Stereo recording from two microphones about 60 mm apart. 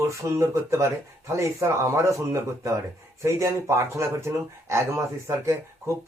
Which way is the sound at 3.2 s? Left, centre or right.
Right.